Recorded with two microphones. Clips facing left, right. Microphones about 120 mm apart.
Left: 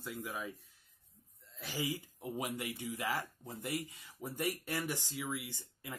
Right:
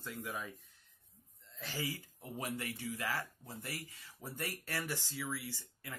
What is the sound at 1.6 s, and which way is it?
Speech, 15° left (ahead or behind).